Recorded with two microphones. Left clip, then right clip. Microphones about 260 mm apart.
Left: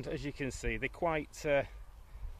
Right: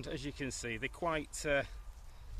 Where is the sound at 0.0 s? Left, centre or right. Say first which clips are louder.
Left 3 dB; left.